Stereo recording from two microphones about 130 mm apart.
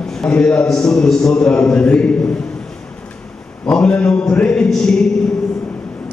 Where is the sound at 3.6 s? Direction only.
10° left (ahead or behind).